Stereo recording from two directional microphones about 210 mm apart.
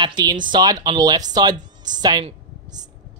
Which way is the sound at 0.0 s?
20° right (ahead or behind).